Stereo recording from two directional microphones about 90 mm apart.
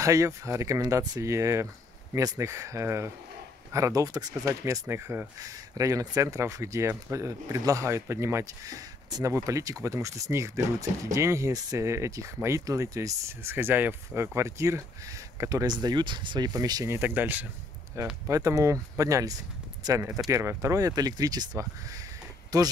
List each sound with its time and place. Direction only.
0.0 s speech: 35° right (ahead or behind)
4.5 s speech: 30° right (ahead or behind)
5.4 s speech: 40° right (ahead or behind)
15.6 s speech: 50° right (ahead or behind)
16.9 s speech: 20° right (ahead or behind)
18.0 s speech: 35° right (ahead or behind)